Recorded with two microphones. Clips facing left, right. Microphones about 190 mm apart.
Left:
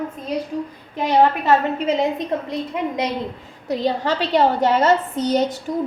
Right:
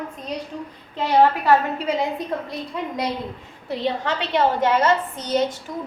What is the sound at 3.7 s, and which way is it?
A woman's voice, 40° left (ahead or behind).